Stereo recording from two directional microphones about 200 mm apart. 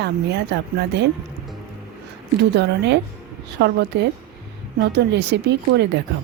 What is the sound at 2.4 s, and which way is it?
Speech, 60° right (ahead or behind).